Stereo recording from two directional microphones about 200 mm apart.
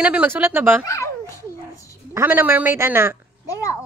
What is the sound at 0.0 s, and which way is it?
Speech, 5° right (ahead or behind).